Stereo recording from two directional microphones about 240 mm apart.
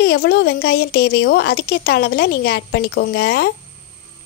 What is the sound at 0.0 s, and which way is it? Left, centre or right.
Speech, left.